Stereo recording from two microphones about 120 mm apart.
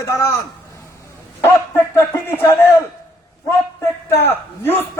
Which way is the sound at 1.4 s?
15° left (ahead or behind).